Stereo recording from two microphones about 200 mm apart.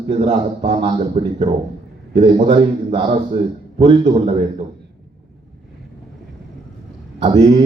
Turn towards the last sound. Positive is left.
turn(degrees=-30)  # may be behind; listen again after turning